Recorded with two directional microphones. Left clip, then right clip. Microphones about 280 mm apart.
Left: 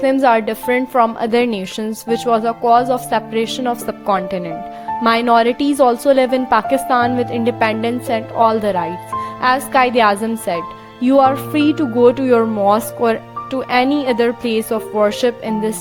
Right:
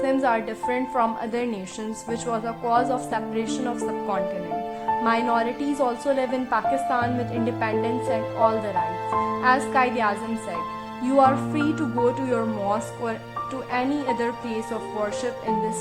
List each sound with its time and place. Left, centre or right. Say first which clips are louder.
0.0 s speech: left 9 dB; left